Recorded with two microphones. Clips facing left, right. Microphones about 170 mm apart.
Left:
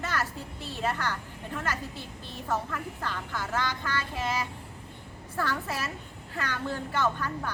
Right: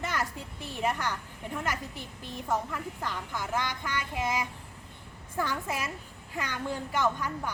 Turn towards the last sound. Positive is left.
turn(degrees=-15)  # may be behind; listen again after turning